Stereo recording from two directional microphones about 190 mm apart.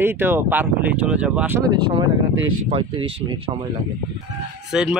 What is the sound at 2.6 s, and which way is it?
Speech, 30° right (ahead or behind).